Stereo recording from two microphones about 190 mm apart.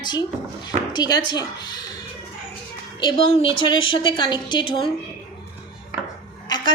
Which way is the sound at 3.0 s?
25° left (ahead or behind).